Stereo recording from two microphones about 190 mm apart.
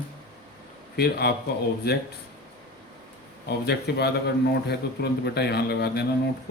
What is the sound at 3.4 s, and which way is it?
Speech, 60° left (ahead or behind).